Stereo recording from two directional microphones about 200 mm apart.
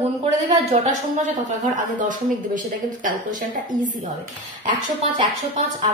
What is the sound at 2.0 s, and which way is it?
Speech, 40° right (ahead or behind).